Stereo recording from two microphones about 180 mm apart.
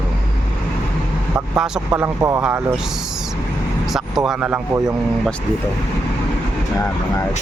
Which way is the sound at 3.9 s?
Centre (ahead or behind).